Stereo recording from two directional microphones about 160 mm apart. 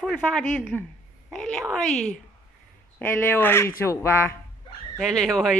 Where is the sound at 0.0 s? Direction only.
5° left (ahead or behind).